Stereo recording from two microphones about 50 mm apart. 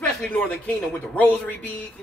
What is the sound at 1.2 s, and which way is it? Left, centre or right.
Speech, left.